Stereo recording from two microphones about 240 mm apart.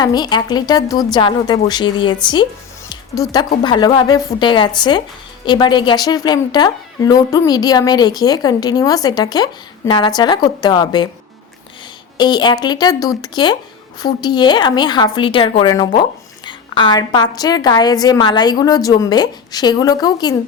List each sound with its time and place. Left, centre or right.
0.0 s a woman's voice: centre
2.9 s music: centre
3.6 s a woman's voice: centre
12.1 s a woman's voice: centre
16.5 s a sound: centre
17.3 s a woman's voice: centre